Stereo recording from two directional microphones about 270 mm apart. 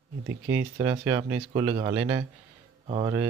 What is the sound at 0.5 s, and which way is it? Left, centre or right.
Speech, centre.